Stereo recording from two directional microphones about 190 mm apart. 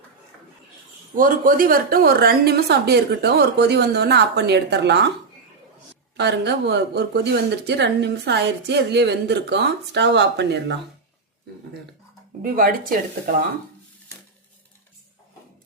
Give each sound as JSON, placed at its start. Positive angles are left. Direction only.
{"t": 1.1, "sound": "a woman's voice", "side_deg": -45}
{"t": 6.1, "sound": "a woman's voice", "side_deg": -65}
{"t": 12.4, "sound": "speech", "side_deg": -45}